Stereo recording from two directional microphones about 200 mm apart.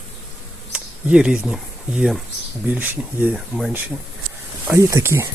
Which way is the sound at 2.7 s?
10° right (ahead or behind).